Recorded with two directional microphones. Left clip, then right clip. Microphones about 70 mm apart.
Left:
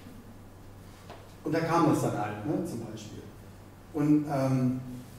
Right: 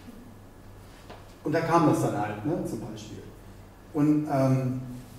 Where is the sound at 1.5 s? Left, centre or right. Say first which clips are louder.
Right 3 dB; centre.